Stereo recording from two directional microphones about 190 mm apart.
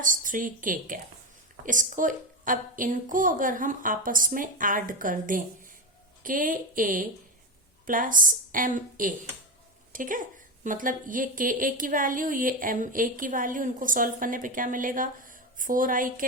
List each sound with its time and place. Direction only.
0.0 s speech: 45° right (ahead or behind)